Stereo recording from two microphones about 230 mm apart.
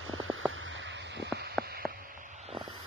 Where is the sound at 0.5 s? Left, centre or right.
Right.